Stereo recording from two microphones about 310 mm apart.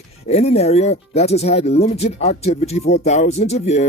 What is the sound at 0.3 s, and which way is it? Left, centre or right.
Speech, centre.